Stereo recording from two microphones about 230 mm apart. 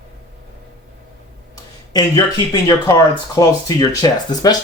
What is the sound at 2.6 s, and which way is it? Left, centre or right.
Speech, centre.